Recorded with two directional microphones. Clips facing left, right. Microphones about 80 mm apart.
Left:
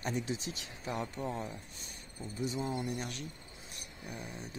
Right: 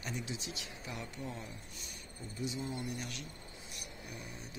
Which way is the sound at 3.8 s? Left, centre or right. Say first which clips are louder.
Left 4 dB; left.